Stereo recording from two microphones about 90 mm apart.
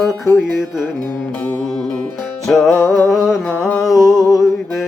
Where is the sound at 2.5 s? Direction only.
5° left (ahead or behind).